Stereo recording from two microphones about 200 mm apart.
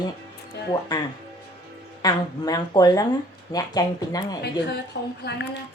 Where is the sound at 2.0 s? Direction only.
20° left (ahead or behind).